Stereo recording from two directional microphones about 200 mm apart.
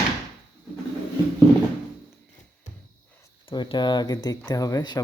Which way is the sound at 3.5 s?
25° left (ahead or behind).